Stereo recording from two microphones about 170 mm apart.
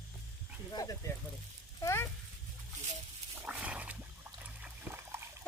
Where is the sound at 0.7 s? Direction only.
20° left (ahead or behind).